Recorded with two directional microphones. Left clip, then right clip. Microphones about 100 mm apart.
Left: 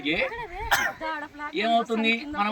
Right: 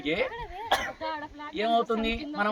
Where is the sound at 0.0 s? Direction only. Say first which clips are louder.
Left 2 dB; 50° right (ahead or behind).